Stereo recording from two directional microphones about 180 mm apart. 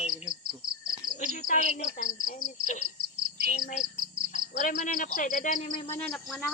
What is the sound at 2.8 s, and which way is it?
Frog, 55° right (ahead or behind).